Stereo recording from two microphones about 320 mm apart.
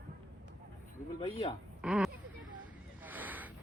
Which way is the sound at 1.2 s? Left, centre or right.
Centre.